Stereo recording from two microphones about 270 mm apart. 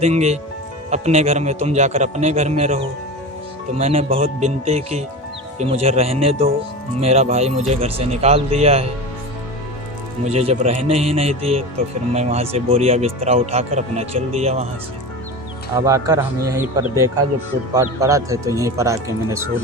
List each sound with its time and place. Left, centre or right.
0.0 s speech: right
10.2 s speech: right
15.7 s speech: centre